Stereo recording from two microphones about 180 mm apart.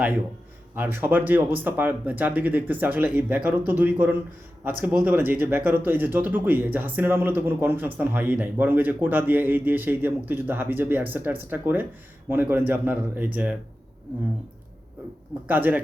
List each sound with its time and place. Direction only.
0.8 s speech: 10° right (ahead or behind)
15.4 s speech: 10° right (ahead or behind)